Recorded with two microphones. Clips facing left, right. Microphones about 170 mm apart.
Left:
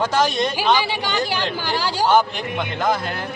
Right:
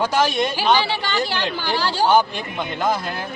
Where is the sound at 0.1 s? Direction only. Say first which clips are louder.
Even; 10° right (ahead or behind).